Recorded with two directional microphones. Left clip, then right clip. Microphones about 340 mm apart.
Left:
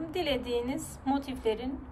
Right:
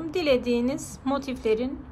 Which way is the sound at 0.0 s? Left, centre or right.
Centre.